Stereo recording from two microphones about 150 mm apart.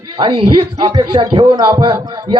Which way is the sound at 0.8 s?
35° right (ahead or behind).